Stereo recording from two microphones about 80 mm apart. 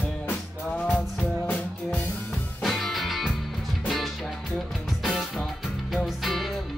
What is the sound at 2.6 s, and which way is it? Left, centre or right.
Music, centre.